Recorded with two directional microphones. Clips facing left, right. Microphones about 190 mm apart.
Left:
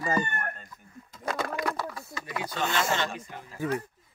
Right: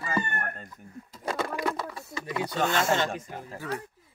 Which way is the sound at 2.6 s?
45° right (ahead or behind).